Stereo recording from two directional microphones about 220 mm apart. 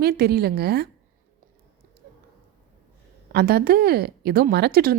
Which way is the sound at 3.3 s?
45° right (ahead or behind).